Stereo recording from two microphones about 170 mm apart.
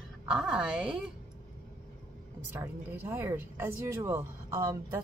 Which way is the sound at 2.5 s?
15° right (ahead or behind).